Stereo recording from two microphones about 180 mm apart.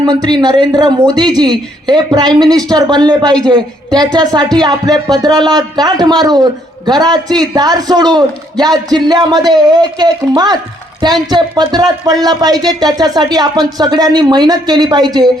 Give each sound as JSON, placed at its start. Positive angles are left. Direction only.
{"t": 0.0, "sound": "speech", "side_deg": -20}